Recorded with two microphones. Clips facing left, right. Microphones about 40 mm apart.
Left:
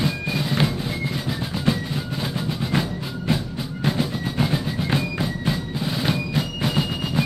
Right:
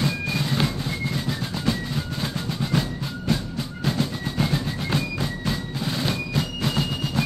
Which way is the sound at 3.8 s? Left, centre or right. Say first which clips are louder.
Left 2 dB; centre.